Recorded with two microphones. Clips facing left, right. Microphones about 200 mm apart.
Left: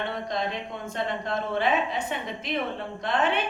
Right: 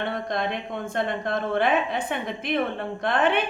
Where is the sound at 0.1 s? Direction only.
55° right (ahead or behind).